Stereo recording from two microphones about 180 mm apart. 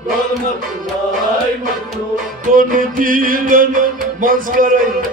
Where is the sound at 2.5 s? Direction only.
50° right (ahead or behind).